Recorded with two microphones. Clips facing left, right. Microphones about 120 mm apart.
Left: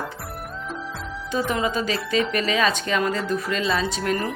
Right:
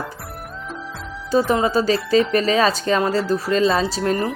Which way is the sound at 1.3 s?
35° right (ahead or behind).